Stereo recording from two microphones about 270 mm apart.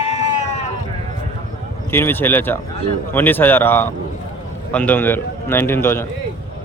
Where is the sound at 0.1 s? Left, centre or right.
Left.